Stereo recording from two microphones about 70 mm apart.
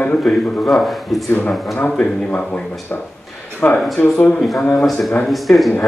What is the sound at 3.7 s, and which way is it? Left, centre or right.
A man's voice, centre.